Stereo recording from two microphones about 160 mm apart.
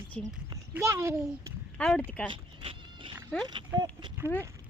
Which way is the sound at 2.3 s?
30° right (ahead or behind).